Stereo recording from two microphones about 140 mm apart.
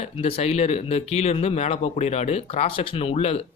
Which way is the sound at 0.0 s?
45° left (ahead or behind).